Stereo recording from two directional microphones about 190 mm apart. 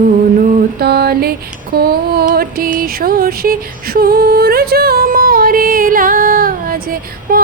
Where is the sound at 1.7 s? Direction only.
55° right (ahead or behind).